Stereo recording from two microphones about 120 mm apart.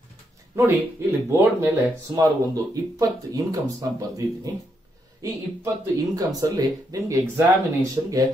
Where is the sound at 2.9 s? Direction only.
30° right (ahead or behind).